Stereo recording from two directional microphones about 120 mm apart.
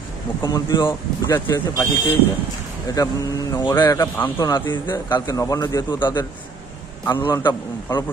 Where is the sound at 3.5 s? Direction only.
25° left (ahead or behind).